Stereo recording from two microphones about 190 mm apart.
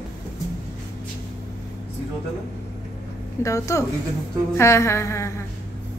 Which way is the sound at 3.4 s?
15° left (ahead or behind).